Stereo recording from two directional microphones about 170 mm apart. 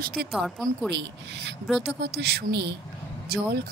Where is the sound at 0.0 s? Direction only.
60° right (ahead or behind).